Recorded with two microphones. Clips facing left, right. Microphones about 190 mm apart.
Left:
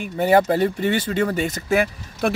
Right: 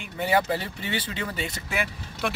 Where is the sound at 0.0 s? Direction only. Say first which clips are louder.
Left 8 dB; 45° left (ahead or behind).